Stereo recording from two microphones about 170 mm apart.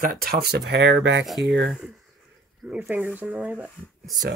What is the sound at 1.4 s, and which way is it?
Speech, 75° right (ahead or behind).